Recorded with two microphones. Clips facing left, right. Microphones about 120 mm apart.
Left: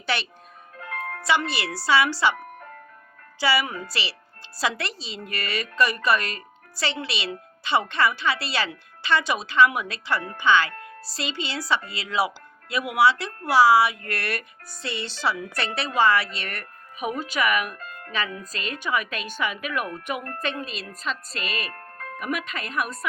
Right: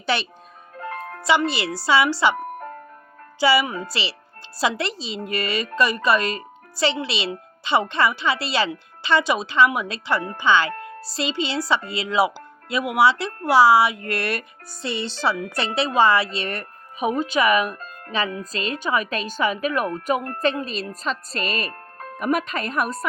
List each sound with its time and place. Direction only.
0.0 s a child's voice: 20° right (ahead or behind)
0.8 s music: 45° right (ahead or behind)
1.2 s a woman's voice: 20° right (ahead or behind)
2.3 s music: 45° right (ahead or behind)
3.4 s a woman's voice: 20° right (ahead or behind); by 23.0 s 35° right (ahead or behind)